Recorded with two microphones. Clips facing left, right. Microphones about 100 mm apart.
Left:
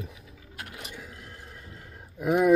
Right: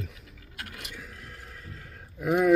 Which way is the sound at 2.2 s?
10° left (ahead or behind).